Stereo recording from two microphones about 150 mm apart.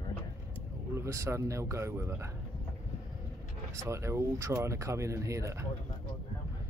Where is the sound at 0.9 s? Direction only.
20° right (ahead or behind).